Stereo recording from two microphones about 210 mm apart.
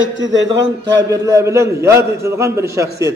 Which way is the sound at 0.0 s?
60° right (ahead or behind).